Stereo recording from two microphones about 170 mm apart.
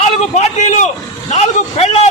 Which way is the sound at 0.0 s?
40° left (ahead or behind).